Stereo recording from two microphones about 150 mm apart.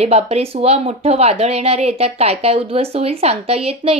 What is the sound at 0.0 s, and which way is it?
Speech, 45° right (ahead or behind).